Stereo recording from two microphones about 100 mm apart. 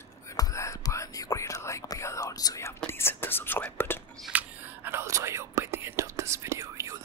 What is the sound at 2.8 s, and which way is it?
Whispering, 25° left (ahead or behind).